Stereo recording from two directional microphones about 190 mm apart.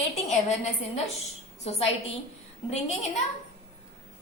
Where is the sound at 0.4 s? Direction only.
35° left (ahead or behind).